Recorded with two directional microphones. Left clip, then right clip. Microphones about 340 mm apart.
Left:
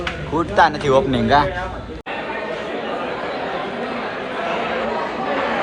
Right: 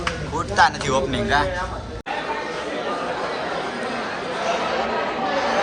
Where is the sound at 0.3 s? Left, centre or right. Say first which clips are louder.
Left 3 dB; centre.